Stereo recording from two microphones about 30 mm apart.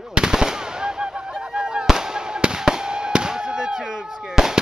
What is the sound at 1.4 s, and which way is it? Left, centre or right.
Honk, right.